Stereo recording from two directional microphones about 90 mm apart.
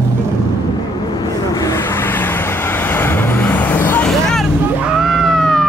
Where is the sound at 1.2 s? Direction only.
40° left (ahead or behind).